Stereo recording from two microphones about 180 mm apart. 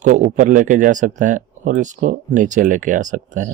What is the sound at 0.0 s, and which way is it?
Speech, 45° right (ahead or behind).